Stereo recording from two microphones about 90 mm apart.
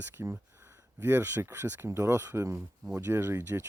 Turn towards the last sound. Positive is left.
turn(degrees=-25)  # may be behind; listen again after turning